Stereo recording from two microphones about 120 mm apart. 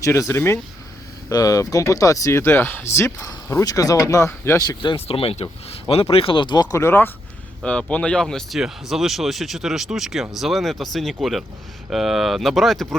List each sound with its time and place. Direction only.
0.0 s speech: 25° left (ahead or behind)
5.0 s speech: 55° left (ahead or behind); by 7.1 s 20° left (ahead or behind)
7.6 s speech: 10° left (ahead or behind)